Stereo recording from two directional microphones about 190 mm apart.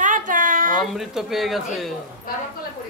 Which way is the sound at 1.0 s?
Centre (ahead or behind).